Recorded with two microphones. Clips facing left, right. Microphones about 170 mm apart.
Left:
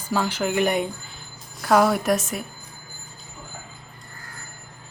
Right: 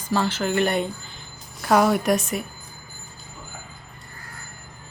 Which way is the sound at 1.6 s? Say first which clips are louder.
Even; centre (ahead or behind).